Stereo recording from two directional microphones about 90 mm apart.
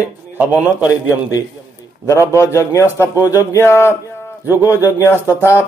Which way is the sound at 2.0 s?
35° left (ahead or behind).